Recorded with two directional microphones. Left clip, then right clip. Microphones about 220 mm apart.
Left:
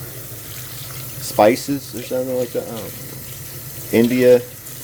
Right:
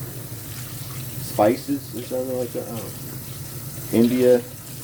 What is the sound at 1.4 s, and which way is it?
Speech, 40° left (ahead or behind).